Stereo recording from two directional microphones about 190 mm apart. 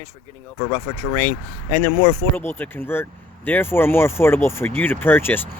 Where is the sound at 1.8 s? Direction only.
25° left (ahead or behind).